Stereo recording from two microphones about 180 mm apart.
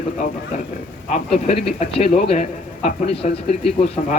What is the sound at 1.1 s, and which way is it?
A man's voice, 35° left (ahead or behind).